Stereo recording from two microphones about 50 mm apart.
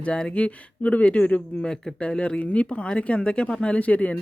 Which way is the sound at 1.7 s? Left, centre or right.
Centre.